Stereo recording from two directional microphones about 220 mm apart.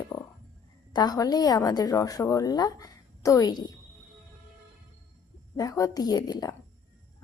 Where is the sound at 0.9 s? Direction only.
20° left (ahead or behind).